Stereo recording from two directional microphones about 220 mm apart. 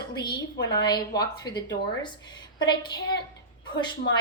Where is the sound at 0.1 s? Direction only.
20° left (ahead or behind).